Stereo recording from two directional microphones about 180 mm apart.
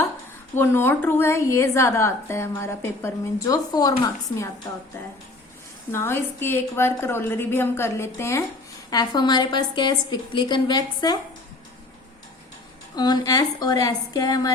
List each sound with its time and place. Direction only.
0.5 s a woman's voice: 10° left (ahead or behind)
5.9 s a woman's voice: 15° left (ahead or behind)
13.0 s a woman's voice: 20° left (ahead or behind)